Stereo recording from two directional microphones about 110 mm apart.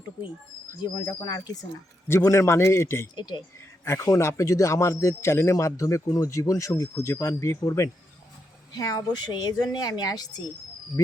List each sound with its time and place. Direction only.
0.8 s speech: 40° left (ahead or behind)
2.0 s a man's voice: 25° left (ahead or behind)
3.2 s speech: 40° left (ahead or behind)
3.8 s a man's voice: 25° left (ahead or behind)